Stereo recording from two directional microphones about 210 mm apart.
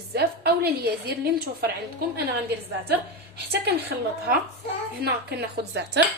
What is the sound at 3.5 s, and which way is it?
Speech, 50° right (ahead or behind).